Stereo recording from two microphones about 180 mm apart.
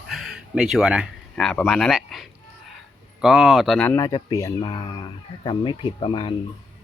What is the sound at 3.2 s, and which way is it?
Speech, centre (ahead or behind).